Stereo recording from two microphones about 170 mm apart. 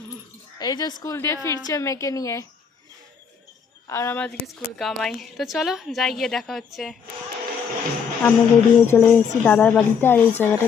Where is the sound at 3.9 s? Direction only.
15° left (ahead or behind).